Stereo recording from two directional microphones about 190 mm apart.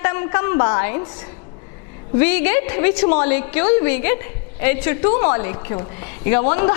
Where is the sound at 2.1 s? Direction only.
10° left (ahead or behind).